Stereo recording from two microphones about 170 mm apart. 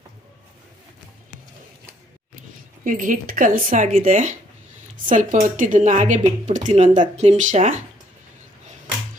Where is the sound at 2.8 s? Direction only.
50° right (ahead or behind).